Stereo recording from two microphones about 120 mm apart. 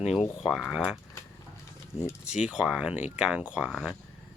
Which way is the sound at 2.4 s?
5° right (ahead or behind).